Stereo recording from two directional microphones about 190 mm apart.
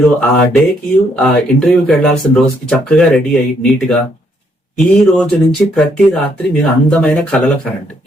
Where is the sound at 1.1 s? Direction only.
5° left (ahead or behind).